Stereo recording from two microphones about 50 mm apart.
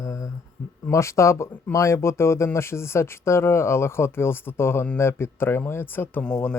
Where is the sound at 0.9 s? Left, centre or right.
Left.